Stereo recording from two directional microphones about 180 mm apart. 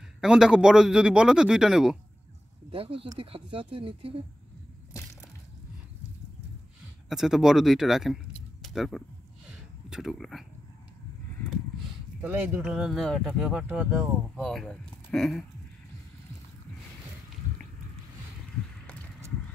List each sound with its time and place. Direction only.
0.2 s speech: 5° right (ahead or behind)
2.7 s speech: 30° right (ahead or behind)
7.1 s speech: centre (ahead or behind)
12.2 s speech: 10° right (ahead or behind)